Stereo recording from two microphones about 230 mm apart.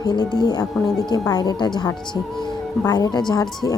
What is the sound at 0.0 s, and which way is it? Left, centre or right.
A woman's voice, centre.